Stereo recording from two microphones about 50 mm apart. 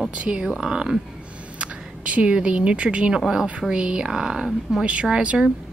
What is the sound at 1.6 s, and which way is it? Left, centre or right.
A woman's voice, right.